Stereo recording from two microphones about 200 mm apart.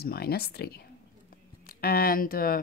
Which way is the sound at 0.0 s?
50° left (ahead or behind).